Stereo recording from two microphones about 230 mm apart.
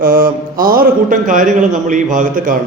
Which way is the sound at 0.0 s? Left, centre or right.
Right.